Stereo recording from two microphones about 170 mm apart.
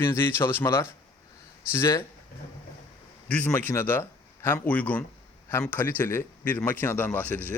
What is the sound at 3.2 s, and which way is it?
A man's voice, 10° left (ahead or behind).